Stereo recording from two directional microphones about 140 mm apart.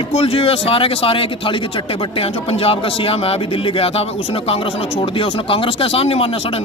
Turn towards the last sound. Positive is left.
turn(degrees=45)  # may be behind; listen again after turning